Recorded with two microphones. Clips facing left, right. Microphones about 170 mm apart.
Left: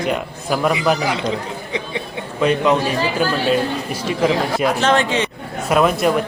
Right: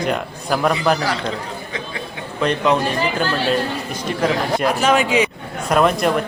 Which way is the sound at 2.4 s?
Centre (ahead or behind).